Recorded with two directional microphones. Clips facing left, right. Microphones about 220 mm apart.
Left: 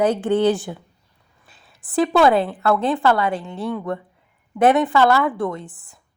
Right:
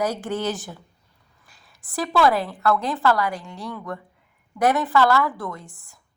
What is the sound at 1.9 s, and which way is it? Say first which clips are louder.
A woman's voice: left 5 dB; 25° left (ahead or behind).